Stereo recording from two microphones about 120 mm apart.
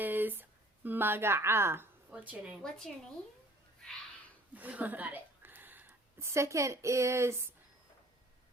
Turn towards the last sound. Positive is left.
turn(degrees=-25)  # may be behind; listen again after turning